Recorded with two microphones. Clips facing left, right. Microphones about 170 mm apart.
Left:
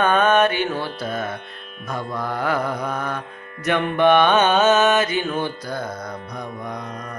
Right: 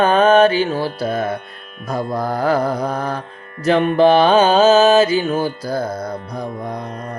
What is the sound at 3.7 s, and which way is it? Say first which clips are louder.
Mantra: right 5 dB; 30° right (ahead or behind).